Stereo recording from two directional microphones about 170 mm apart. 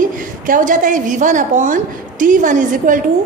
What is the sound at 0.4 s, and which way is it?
A woman's voice, 50° right (ahead or behind).